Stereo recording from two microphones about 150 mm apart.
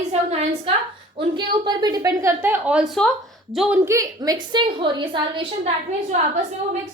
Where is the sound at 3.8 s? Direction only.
20° right (ahead or behind).